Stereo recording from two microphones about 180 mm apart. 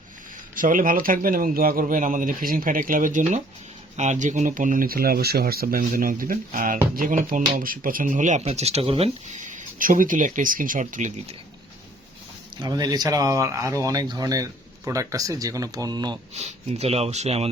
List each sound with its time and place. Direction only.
0.5 s speech: 50° right (ahead or behind)
12.5 s speech: 20° right (ahead or behind)
16.3 s speech: 35° right (ahead or behind)